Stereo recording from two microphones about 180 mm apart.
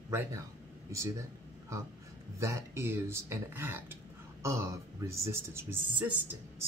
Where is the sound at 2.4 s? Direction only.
15° right (ahead or behind).